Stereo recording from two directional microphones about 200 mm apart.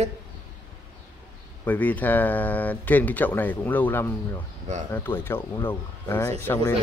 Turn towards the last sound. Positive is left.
turn(degrees=10)  # may be behind; listen again after turning